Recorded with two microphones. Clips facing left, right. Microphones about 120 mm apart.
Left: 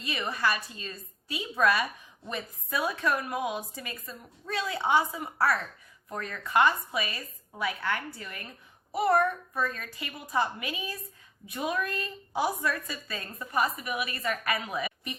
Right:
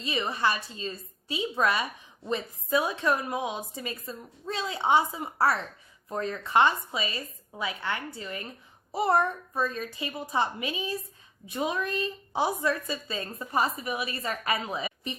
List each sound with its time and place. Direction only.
0.0 s a woman's voice: 25° right (ahead or behind)